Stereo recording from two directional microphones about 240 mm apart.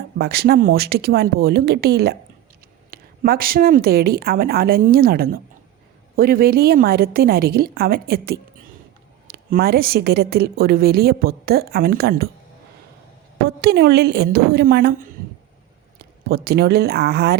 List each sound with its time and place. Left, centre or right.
0.2 s a woman's voice: right
13.4 s a woman's voice: right
16.0 s speech: right